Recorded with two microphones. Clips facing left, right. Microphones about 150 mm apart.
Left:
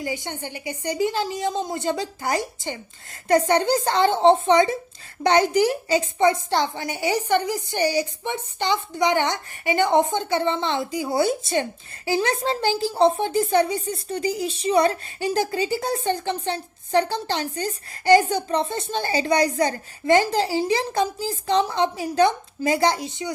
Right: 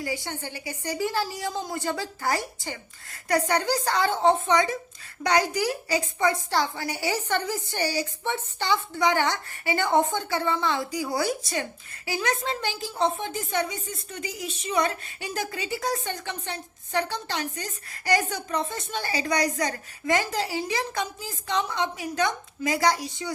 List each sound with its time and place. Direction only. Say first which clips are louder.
0.0 s a woman's voice: left 2 dB; 20° left (ahead or behind)